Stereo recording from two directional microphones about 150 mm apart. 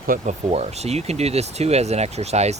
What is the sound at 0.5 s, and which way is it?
Speech, 45° right (ahead or behind).